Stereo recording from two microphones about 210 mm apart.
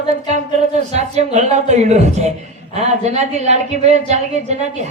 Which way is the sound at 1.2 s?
35° right (ahead or behind).